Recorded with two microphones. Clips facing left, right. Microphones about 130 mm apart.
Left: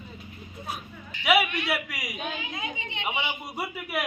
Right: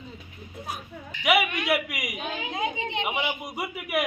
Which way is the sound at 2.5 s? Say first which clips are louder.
Right 7 dB; 45° right (ahead or behind).